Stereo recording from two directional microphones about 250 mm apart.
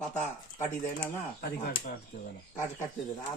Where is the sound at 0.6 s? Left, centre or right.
Centre.